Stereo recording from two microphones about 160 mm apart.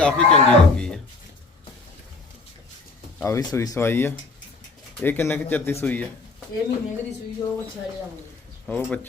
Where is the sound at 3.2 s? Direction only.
20° left (ahead or behind).